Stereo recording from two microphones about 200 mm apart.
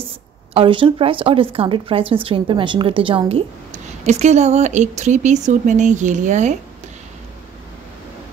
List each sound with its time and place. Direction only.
0.6 s a woman's voice: 25° right (ahead or behind)